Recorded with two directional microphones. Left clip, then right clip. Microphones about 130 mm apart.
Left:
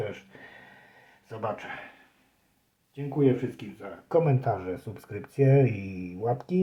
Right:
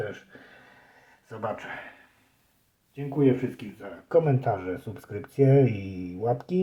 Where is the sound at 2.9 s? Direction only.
5° right (ahead or behind).